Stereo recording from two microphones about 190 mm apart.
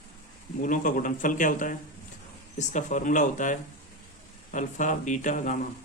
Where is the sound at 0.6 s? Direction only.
45° left (ahead or behind).